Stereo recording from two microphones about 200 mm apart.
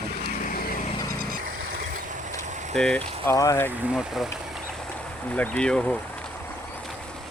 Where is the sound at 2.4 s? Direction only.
35° right (ahead or behind).